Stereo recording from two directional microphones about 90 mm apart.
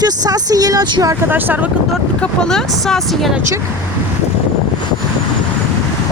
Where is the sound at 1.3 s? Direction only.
20° right (ahead or behind).